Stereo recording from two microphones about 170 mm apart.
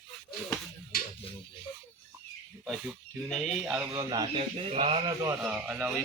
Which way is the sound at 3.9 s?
25° right (ahead or behind).